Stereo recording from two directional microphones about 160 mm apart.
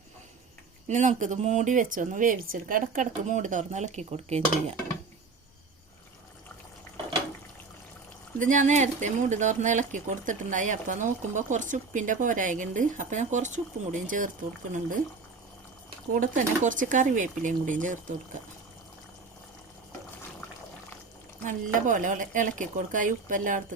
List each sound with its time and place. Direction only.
0.9 s speech: 50° right (ahead or behind)
8.4 s speech: 50° right (ahead or behind)
16.2 s speech: 55° right (ahead or behind)
21.4 s speech: 55° right (ahead or behind)